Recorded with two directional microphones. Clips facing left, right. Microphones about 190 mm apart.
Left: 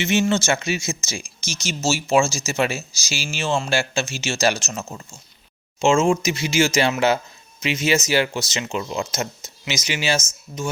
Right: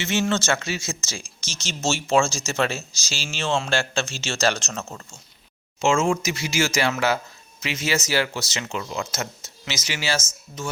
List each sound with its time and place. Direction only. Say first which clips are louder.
0.0 s speech: left 3 dB; 15° left (ahead or behind)
5.8 s speech: left 3 dB; 20° left (ahead or behind)